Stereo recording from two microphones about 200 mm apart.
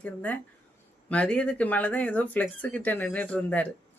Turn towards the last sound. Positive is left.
turn(degrees=5)  # may be behind; listen again after turning